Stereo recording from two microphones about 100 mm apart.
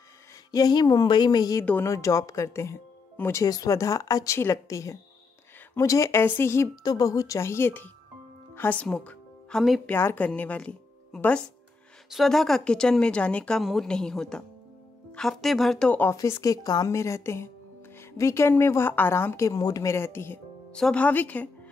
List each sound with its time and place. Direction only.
0.5 s a woman's voice: 40° left (ahead or behind)
6.7 s a woman's voice: 40° left (ahead or behind); by 9.8 s 5° left (ahead or behind)
9.8 s a woman's voice: 20° left (ahead or behind)
12.1 s a woman's voice: centre (ahead or behind)
15.9 s a woman's voice: 20° left (ahead or behind)
16.2 s a woman's voice: 30° left (ahead or behind)
20.7 s a woman's voice: 10° left (ahead or behind)